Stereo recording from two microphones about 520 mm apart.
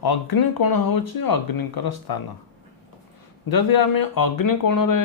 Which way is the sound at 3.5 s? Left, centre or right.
Left.